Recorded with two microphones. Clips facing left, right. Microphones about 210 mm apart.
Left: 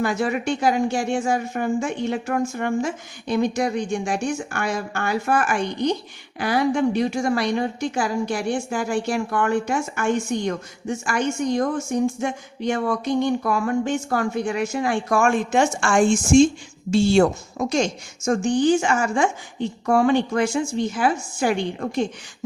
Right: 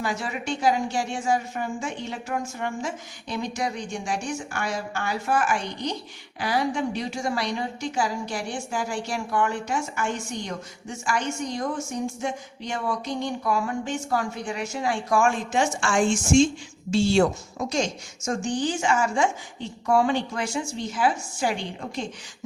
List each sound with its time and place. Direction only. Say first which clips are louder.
0.0 s a woman's voice: left 7 dB; 55° left (ahead or behind)
18.3 s a woman's voice: left 8 dB; 55° left (ahead or behind)